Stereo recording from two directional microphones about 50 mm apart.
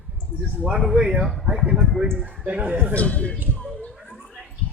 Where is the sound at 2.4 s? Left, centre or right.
Right.